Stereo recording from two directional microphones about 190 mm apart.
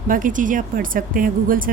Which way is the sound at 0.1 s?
45° right (ahead or behind).